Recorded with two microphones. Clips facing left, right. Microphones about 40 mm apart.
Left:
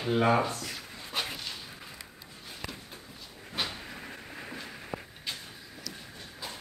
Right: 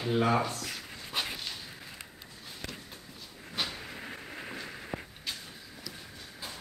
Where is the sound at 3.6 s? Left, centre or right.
Centre.